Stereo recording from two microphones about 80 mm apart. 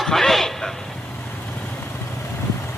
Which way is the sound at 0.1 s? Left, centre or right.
Centre.